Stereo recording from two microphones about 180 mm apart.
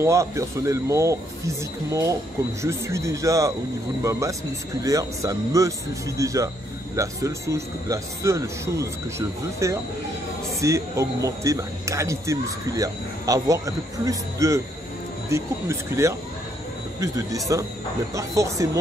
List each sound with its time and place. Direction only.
0.0 s speech: 15° right (ahead or behind)